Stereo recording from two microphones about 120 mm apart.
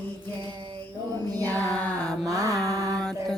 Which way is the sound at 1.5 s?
10° left (ahead or behind).